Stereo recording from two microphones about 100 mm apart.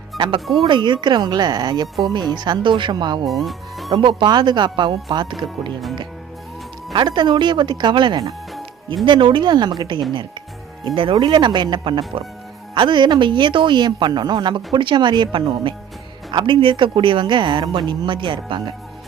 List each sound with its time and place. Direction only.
0.2 s speech: 55° right (ahead or behind)
3.2 s speech: centre (ahead or behind)
3.9 s speech: 50° right (ahead or behind)
6.9 s speech: 50° right (ahead or behind)